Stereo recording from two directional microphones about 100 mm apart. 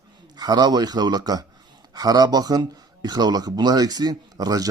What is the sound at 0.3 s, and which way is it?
A man's voice, 45° right (ahead or behind).